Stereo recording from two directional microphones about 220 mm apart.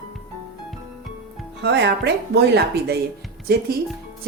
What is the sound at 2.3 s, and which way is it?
A woman's voice, 50° right (ahead or behind).